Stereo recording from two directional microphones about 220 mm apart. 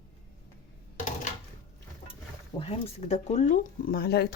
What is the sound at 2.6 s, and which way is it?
Speech, 25° left (ahead or behind).